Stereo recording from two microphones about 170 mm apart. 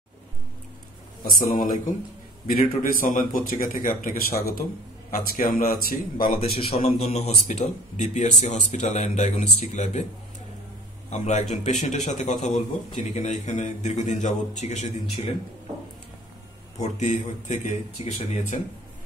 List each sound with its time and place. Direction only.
1.2 s a man's voice: 55° left (ahead or behind)
6.7 s a man's voice: 35° left (ahead or behind)
11.1 s a man's voice: 45° left (ahead or behind)
16.8 s a man's voice: 45° left (ahead or behind)